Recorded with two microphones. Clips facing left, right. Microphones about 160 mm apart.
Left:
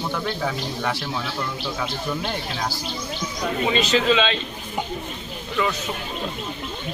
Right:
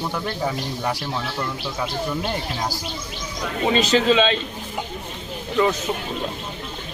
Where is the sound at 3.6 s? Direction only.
40° right (ahead or behind).